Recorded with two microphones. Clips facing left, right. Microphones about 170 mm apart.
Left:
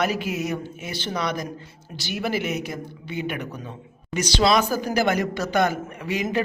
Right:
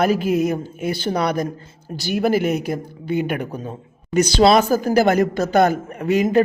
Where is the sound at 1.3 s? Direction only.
55° right (ahead or behind).